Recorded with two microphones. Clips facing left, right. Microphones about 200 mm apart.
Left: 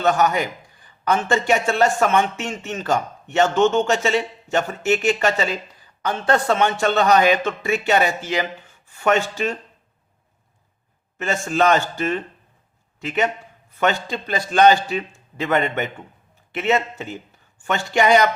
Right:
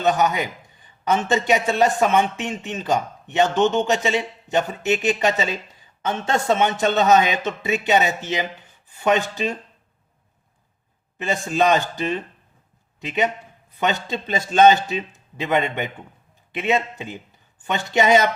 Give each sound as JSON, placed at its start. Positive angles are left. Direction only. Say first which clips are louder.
{"t": 0.0, "sound": "a man's voice", "louder": "left 1 dB", "side_deg": -15}
{"t": 11.2, "sound": "a man's voice", "louder": "left 1 dB", "side_deg": -15}